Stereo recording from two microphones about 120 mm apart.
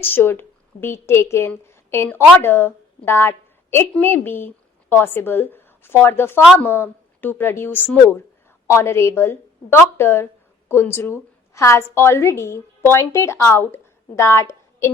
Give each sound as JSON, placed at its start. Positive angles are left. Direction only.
{"t": 0.0, "sound": "a woman's voice", "side_deg": 20}